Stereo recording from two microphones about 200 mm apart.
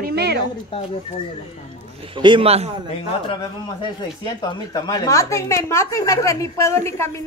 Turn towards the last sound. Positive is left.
turn(degrees=15)  # may be behind; listen again after turning